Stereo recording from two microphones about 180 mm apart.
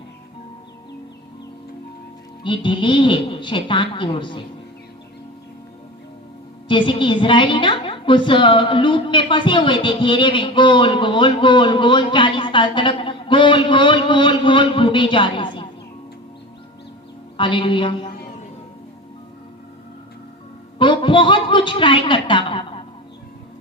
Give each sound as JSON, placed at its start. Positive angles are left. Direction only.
{"t": 2.4, "sound": "a woman's voice", "side_deg": 25}
{"t": 6.7, "sound": "a woman's voice", "side_deg": 25}
{"t": 17.3, "sound": "a woman's voice", "side_deg": 25}
{"t": 20.7, "sound": "a woman's voice", "side_deg": 25}